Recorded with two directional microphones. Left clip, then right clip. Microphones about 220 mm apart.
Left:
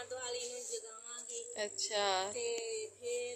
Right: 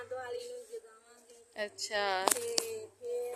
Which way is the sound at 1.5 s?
5° right (ahead or behind).